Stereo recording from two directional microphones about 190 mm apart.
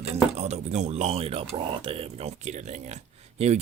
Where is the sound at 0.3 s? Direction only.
35° right (ahead or behind).